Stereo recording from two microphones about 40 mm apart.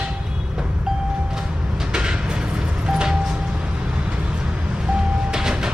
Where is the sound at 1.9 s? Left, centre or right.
Right.